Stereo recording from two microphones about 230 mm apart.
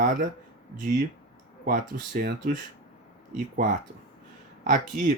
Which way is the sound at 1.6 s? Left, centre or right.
Right.